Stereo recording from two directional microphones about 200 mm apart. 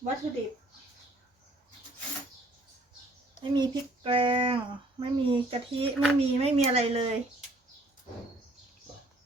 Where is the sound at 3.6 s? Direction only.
25° right (ahead or behind).